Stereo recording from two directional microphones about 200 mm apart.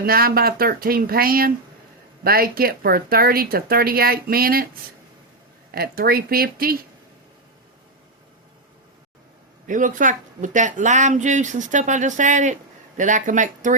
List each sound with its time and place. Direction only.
0.0 s speech: 50° right (ahead or behind)
5.7 s speech: 50° right (ahead or behind)
9.6 s speech: 40° right (ahead or behind)